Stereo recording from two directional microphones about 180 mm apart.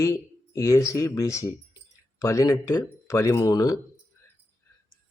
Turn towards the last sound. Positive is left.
turn(degrees=20)  # may be behind; listen again after turning